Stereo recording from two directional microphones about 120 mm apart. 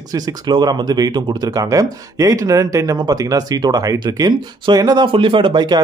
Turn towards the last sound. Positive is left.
turn(degrees=-35)  # may be behind; listen again after turning